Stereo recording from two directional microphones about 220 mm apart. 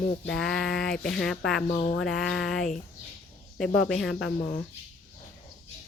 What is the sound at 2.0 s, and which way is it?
Speech, centre (ahead or behind).